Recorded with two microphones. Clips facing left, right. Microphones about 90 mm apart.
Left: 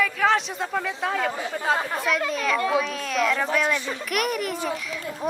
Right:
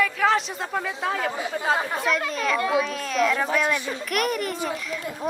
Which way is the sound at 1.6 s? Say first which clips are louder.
Even; 5° right (ahead or behind).